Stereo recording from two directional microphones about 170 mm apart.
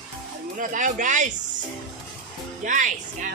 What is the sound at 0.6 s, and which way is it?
Speech, 50° right (ahead or behind).